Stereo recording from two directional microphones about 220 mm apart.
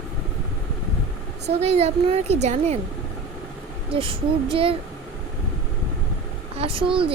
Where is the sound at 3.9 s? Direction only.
25° right (ahead or behind).